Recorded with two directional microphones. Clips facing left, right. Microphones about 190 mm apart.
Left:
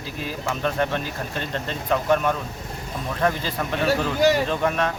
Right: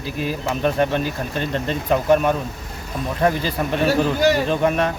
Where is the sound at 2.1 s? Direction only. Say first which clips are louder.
Right 5 dB; 15° right (ahead or behind).